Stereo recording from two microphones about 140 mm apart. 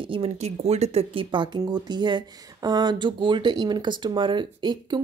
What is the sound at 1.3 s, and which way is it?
Speech, 35° right (ahead or behind).